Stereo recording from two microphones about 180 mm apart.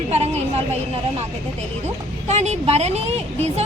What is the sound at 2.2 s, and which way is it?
A woman's voice, 40° right (ahead or behind).